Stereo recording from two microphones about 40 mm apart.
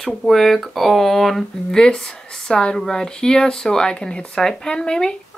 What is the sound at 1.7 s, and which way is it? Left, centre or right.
Speech, centre.